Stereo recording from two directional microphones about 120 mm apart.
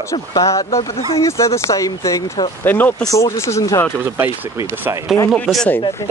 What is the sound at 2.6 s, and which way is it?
Speech, 15° left (ahead or behind).